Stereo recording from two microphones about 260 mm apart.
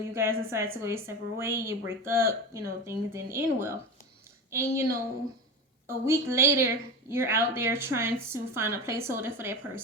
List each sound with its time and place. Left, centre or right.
0.1 s a woman's voice: centre